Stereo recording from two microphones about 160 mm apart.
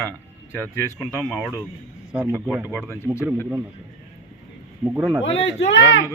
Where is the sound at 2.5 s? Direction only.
10° right (ahead or behind).